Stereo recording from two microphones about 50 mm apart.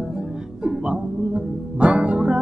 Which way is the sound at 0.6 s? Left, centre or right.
Centre.